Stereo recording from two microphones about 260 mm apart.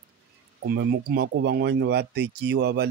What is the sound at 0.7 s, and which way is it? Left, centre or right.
Speech, right.